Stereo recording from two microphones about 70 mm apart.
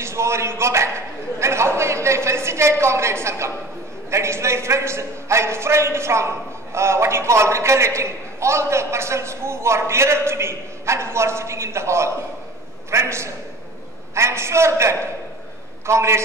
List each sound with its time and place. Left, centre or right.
0.0 s a man's voice: right